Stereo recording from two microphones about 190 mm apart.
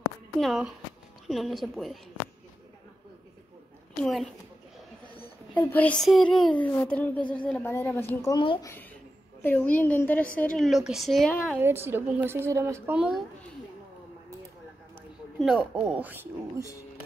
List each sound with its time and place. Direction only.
0.0 s a sound: centre (ahead or behind)
1.2 s a woman's voice: centre (ahead or behind)
4.0 s a woman's voice: centre (ahead or behind)
5.1 s a sound: 30° left (ahead or behind)
5.6 s a woman's voice: 10° left (ahead or behind)
9.4 s a woman's voice: 10° left (ahead or behind)
11.5 s a woman's voice: 10° right (ahead or behind)
15.3 s a woman's voice: centre (ahead or behind)